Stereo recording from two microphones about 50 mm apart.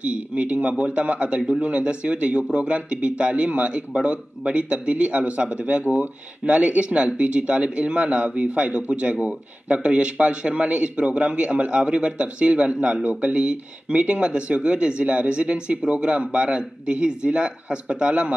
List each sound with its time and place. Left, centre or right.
0.0 s a man's voice: right